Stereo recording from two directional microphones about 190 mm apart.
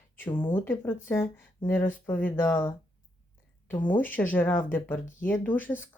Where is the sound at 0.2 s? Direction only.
10° left (ahead or behind).